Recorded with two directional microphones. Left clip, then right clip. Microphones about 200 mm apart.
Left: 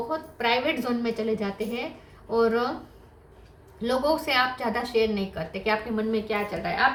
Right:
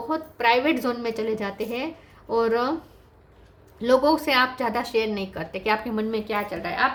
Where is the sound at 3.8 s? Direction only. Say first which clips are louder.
Right 5 dB; 50° right (ahead or behind).